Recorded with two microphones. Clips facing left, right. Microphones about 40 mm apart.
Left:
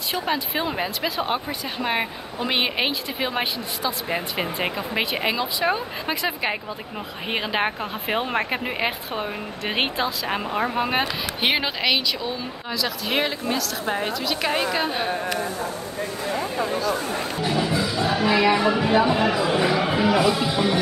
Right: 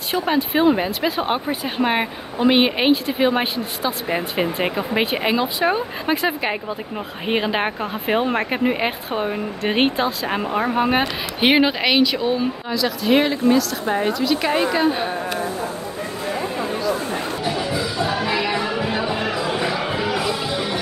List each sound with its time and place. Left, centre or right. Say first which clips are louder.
0.2 s speech: right 9 dB; centre
1.1 s speech: right 4 dB; right; by 4.7 s centre
4.7 s speech: right 4 dB; centre
12.6 s speech: right 3 dB; centre
17.4 s music: left 2 dB; centre